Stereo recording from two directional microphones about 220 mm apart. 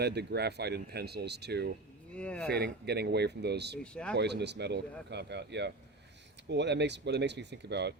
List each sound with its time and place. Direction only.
0.0 s speech: 50° right (ahead or behind)
2.1 s speech: 5° left (ahead or behind)
2.5 s speech: 50° right (ahead or behind)